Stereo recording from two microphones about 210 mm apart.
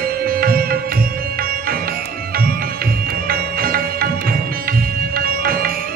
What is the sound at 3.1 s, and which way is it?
Music, 45° right (ahead or behind).